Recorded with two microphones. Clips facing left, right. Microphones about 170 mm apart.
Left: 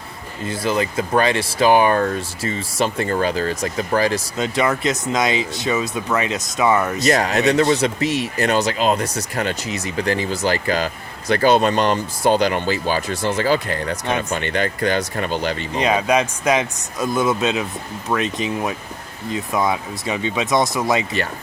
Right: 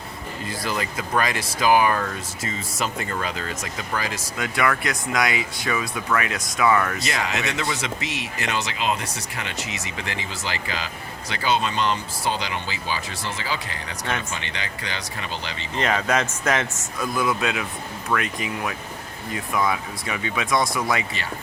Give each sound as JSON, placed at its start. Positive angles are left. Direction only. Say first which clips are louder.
{"t": 0.4, "sound": "speech", "louder": "left 8 dB", "side_deg": 25}
{"t": 4.4, "sound": "speech", "louder": "left 1 dB", "side_deg": 25}
{"t": 7.0, "sound": "speech", "louder": "left 10 dB", "side_deg": 40}
{"t": 15.7, "sound": "speech", "louder": "left 4 dB", "side_deg": 15}
{"t": 17.0, "sound": "speech", "louder": "left 5 dB", "side_deg": 25}